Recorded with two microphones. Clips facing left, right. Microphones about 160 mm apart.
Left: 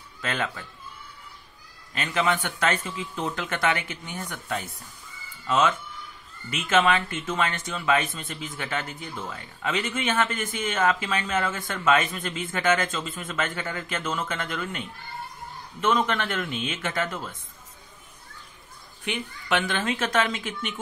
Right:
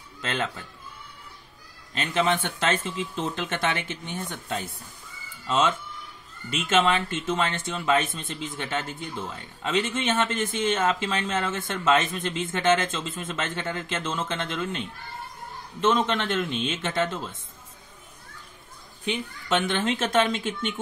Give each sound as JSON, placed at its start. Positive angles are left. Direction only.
{"t": 0.2, "sound": "speech", "side_deg": -25}
{"t": 2.0, "sound": "speech", "side_deg": -25}
{"t": 6.8, "sound": "speech", "side_deg": -25}
{"t": 19.5, "sound": "speech", "side_deg": -25}